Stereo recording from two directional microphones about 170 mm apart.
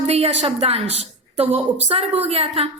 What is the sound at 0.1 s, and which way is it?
A woman's voice, 40° right (ahead or behind).